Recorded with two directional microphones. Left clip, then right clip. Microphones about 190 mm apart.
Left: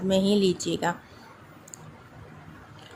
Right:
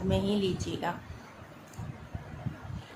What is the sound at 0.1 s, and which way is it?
Speech, 30° left (ahead or behind).